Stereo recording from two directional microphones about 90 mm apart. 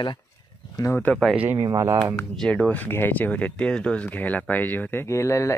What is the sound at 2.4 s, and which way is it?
Speech, 15° left (ahead or behind).